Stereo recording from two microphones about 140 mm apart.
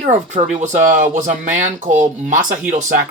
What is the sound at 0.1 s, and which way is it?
Speech, 60° right (ahead or behind).